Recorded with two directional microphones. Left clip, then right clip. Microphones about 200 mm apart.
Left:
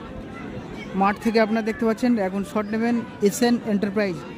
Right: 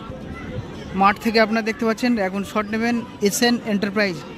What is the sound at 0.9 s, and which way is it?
A man's voice, 5° left (ahead or behind).